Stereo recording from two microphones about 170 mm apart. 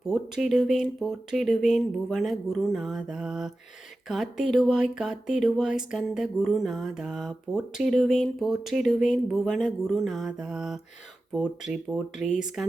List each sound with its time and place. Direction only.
0.1 s speech: centre (ahead or behind)